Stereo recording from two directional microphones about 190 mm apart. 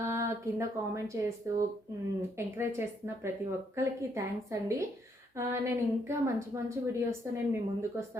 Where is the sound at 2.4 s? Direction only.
15° right (ahead or behind).